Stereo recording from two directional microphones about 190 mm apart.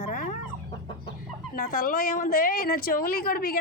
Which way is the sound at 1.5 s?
50° left (ahead or behind).